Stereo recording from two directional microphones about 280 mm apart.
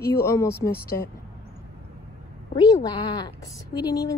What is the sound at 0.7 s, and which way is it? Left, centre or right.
Speech, left.